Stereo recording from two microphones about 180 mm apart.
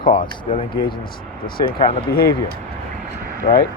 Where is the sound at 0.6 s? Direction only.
25° left (ahead or behind).